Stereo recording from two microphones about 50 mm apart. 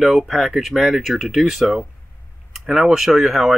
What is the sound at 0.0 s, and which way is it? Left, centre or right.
Speech, centre.